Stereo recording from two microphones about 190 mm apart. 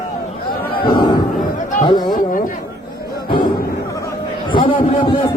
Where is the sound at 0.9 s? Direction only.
25° left (ahead or behind).